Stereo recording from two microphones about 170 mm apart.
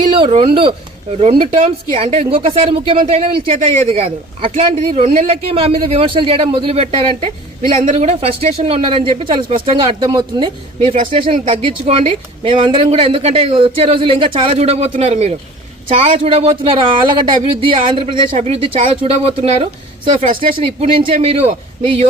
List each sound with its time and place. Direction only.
0.2 s speech: 35° right (ahead or behind)